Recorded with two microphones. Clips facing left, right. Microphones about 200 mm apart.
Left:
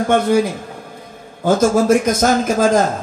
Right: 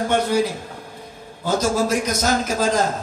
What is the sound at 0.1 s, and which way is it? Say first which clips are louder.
A man's voice: left 6 dB; 50° left (ahead or behind).